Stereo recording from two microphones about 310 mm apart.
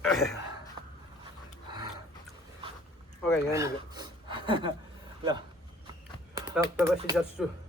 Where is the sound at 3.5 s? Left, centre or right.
Centre.